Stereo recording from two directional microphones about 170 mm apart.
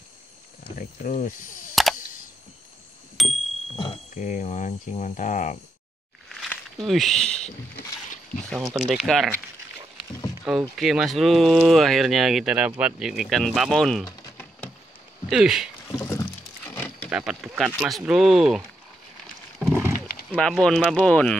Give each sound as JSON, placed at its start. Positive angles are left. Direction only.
{"t": 0.7, "sound": "speech", "side_deg": 50}
{"t": 3.2, "sound": "a sound", "side_deg": 0}
{"t": 3.7, "sound": "speech", "side_deg": 40}
{"t": 6.2, "sound": "a sound", "side_deg": 0}
{"t": 8.7, "sound": "speech", "side_deg": -5}
{"t": 10.5, "sound": "speech", "side_deg": 0}
{"t": 14.2, "sound": "a sound", "side_deg": 15}
{"t": 15.2, "sound": "speech", "side_deg": 0}
{"t": 15.9, "sound": "rowboat", "side_deg": 15}
{"t": 17.1, "sound": "speech", "side_deg": -5}
{"t": 19.6, "sound": "wild animals", "side_deg": -15}
{"t": 20.3, "sound": "speech", "side_deg": 5}